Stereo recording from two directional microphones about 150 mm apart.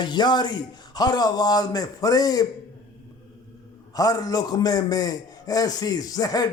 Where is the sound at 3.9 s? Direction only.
25° left (ahead or behind).